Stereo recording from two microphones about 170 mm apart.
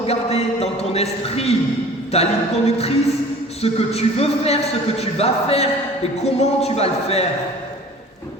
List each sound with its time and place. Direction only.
0.0 s a man's voice: 35° left (ahead or behind)